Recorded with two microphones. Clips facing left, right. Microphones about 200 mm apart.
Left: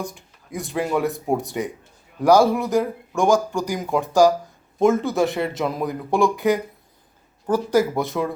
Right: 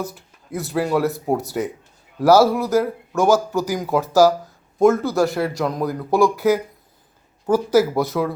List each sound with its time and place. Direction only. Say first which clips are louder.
0.0 s speech: right 2 dB; 5° right (ahead or behind)